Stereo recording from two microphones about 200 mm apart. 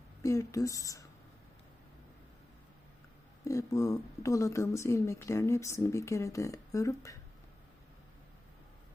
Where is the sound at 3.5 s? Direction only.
15° left (ahead or behind).